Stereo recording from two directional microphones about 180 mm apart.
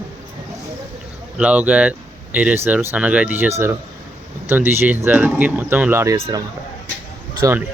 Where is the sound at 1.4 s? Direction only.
5° right (ahead or behind).